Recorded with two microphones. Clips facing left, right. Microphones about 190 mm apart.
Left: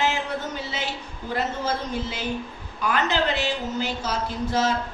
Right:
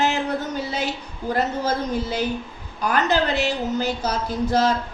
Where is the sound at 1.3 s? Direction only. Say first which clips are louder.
Right 4 dB; 40° right (ahead or behind).